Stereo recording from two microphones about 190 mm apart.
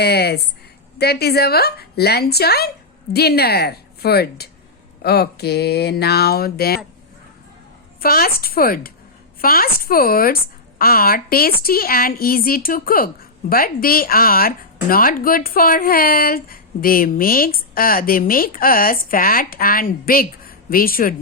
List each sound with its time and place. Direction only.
0.0 s speech: 60° left (ahead or behind)
8.0 s speech: 50° left (ahead or behind)